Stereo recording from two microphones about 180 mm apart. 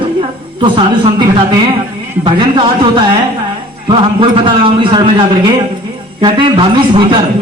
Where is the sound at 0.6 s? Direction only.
30° right (ahead or behind).